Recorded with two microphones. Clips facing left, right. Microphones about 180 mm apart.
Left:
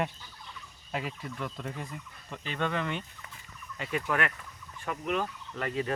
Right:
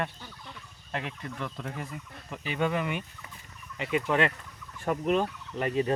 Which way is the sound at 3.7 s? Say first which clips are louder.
Right 4 dB; 20° right (ahead or behind).